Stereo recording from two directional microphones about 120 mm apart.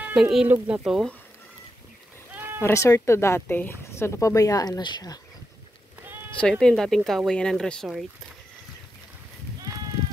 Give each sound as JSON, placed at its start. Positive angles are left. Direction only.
{"t": 0.0, "sound": "speech", "side_deg": -5}
{"t": 2.3, "sound": "bleat", "side_deg": -15}
{"t": 2.6, "sound": "speech", "side_deg": 25}
{"t": 6.6, "sound": "speech", "side_deg": 5}